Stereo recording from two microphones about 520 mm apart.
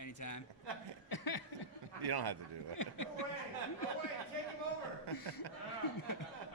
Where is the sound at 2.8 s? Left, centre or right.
Left.